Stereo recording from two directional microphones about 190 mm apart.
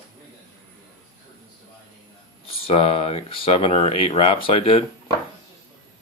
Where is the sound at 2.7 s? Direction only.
30° left (ahead or behind).